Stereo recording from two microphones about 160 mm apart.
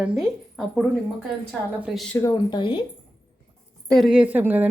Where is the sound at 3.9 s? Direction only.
Centre (ahead or behind).